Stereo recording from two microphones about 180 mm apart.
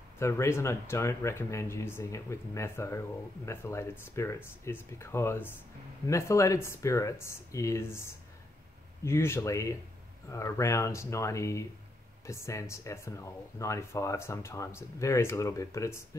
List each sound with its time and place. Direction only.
0.2 s speech: 15° left (ahead or behind)